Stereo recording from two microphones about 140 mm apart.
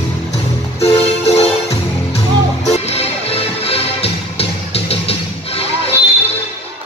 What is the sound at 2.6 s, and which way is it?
Music, 50° left (ahead or behind).